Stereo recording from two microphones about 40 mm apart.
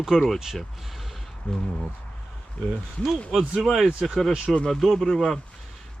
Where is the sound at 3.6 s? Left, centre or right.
Centre.